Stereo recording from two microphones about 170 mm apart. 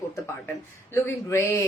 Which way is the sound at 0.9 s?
15° left (ahead or behind).